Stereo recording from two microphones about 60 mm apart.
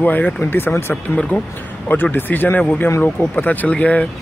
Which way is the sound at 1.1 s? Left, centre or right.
Centre.